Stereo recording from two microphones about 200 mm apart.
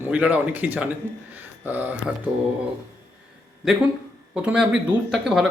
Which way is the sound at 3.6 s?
5° right (ahead or behind).